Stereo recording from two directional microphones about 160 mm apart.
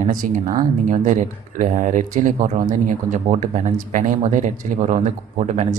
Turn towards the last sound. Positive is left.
turn(degrees=-50)  # may be behind; listen again after turning